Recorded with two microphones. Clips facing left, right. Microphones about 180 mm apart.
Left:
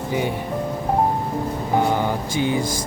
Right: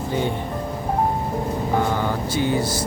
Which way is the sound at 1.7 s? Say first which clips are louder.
Left 3 dB; 15° left (ahead or behind).